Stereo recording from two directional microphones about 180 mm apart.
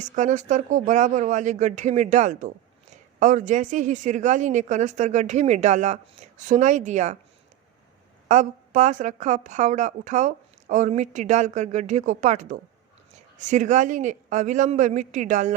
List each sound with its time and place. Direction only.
0.0 s speech: 45° right (ahead or behind)
8.3 s speech: 45° right (ahead or behind)